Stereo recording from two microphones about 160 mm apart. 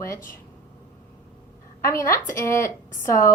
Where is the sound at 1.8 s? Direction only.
15° left (ahead or behind).